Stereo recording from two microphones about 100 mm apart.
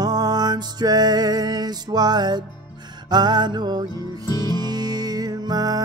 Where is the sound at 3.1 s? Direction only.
45° right (ahead or behind).